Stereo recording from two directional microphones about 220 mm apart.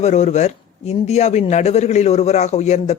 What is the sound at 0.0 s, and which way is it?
Speech, 30° left (ahead or behind).